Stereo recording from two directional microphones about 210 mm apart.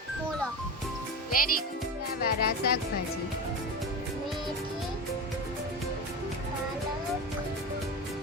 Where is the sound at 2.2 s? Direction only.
50° left (ahead or behind).